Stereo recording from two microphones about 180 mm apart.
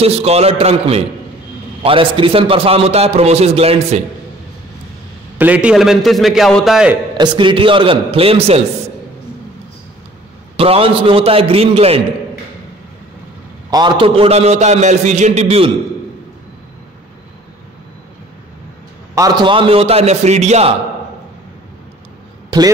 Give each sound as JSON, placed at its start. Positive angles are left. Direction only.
{"t": 0.0, "sound": "a man's voice", "side_deg": -35}
{"t": 5.4, "sound": "a man's voice", "side_deg": -5}
{"t": 7.2, "sound": "a man's voice", "side_deg": -25}
{"t": 10.6, "sound": "a man's voice", "side_deg": -30}
{"t": 13.7, "sound": "a man's voice", "side_deg": -25}
{"t": 19.1, "sound": "a man's voice", "side_deg": -20}